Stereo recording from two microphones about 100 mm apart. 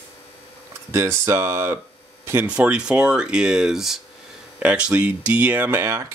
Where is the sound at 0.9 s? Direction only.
30° right (ahead or behind).